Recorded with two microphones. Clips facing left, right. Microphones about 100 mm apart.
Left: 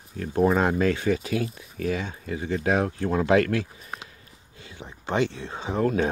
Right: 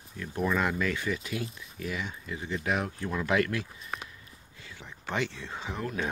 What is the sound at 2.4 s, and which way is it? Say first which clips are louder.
Speech: left 7 dB; 40° left (ahead or behind).